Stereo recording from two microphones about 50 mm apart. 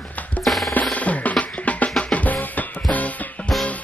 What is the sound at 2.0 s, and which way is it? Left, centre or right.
Music, left.